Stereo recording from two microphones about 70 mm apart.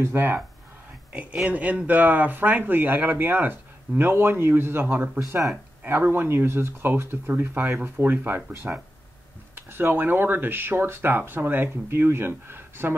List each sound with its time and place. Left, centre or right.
0.0 s speech: right
1.1 s speech: centre
9.6 s speech: right